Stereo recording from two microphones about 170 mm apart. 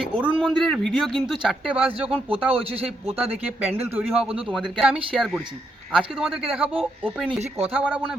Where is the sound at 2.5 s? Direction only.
35° right (ahead or behind).